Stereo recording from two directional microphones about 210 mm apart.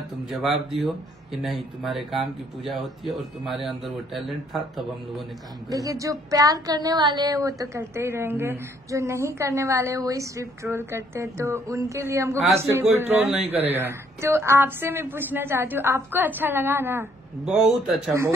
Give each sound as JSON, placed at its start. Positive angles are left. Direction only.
{"t": 0.3, "sound": "speech", "side_deg": 0}
{"t": 5.7, "sound": "speech", "side_deg": -15}